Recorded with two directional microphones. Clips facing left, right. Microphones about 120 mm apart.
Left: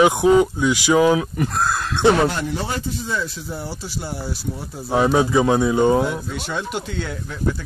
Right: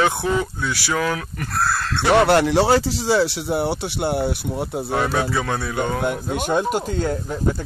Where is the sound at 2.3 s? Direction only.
90° right; by 4.7 s 65° right (ahead or behind).